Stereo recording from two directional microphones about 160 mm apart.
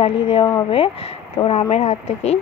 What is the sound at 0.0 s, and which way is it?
Speech, 35° left (ahead or behind).